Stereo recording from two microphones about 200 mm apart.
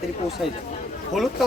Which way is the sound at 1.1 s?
Centre (ahead or behind).